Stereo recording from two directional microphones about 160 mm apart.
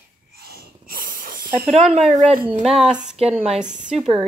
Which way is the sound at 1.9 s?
45° right (ahead or behind).